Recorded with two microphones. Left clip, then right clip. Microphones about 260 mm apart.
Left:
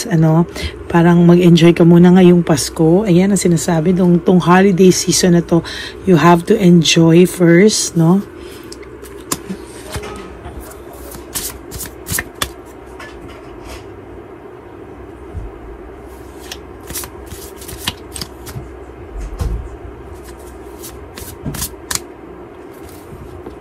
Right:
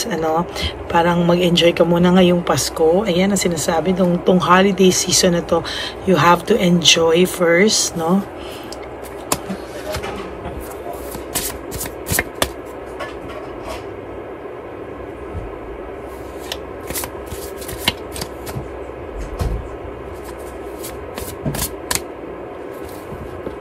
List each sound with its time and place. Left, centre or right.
0.0 s speech: left